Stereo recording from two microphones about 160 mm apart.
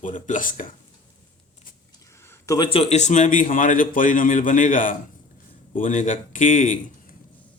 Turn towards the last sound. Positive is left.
turn(degrees=55)  # may be behind; listen again after turning